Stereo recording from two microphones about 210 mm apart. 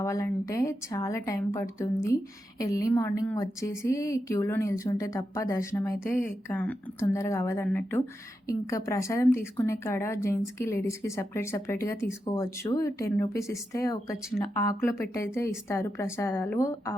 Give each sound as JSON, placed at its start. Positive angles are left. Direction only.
{"t": 0.0, "sound": "a woman's voice", "side_deg": 15}